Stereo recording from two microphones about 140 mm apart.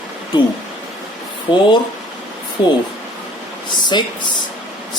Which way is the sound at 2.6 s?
35° left (ahead or behind).